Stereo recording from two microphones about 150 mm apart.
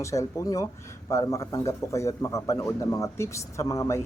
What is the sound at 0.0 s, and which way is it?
A man's voice, 20° left (ahead or behind).